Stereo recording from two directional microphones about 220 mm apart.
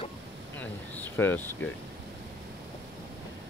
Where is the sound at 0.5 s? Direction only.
10° left (ahead or behind).